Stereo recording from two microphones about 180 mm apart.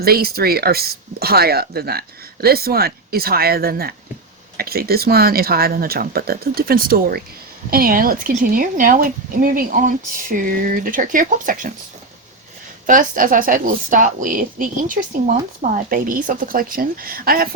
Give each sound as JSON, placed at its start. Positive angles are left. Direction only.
{"t": 0.0, "sound": "speech", "side_deg": -60}
{"t": 12.8, "sound": "speech", "side_deg": -50}